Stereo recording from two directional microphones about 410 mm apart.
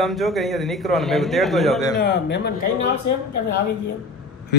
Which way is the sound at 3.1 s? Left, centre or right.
Left.